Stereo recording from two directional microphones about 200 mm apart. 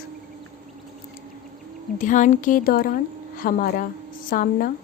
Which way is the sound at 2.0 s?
40° left (ahead or behind).